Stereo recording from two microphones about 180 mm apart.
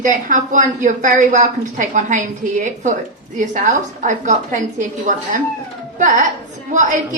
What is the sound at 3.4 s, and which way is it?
A woman's voice, 45° right (ahead or behind).